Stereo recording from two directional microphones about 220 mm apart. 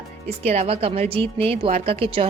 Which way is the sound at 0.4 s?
30° right (ahead or behind).